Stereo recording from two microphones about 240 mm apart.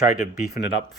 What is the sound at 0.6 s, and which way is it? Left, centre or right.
Speech, left.